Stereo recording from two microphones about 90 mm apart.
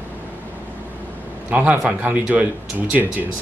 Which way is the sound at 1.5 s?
15° right (ahead or behind).